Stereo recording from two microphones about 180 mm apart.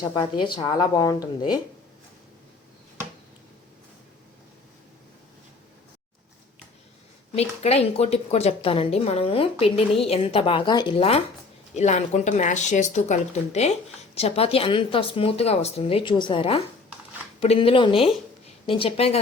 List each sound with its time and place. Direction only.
0.1 s a woman's voice: 25° left (ahead or behind)
7.3 s a woman's voice: 35° left (ahead or behind)